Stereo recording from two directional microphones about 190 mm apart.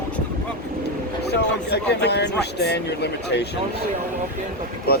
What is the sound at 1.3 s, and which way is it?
Speech, 60° left (ahead or behind).